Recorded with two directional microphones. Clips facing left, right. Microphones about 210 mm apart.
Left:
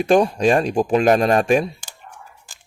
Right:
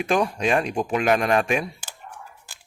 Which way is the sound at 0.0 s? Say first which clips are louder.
Left 7 dB; 35° left (ahead or behind).